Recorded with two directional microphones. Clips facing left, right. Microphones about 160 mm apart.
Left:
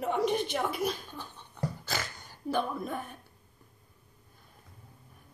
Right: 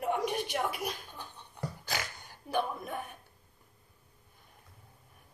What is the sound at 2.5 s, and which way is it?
Speech, 15° right (ahead or behind).